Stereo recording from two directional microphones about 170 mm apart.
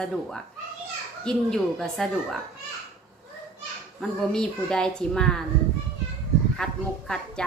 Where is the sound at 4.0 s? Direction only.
5° left (ahead or behind).